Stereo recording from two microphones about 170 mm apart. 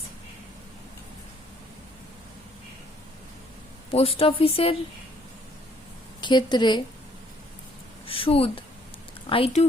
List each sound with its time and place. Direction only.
3.9 s speech: 35° left (ahead or behind)
6.2 s a woman's voice: 25° left (ahead or behind)
8.0 s speech: 35° left (ahead or behind)